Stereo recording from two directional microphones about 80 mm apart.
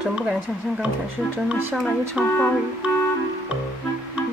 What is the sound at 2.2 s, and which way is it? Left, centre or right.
Speech, centre.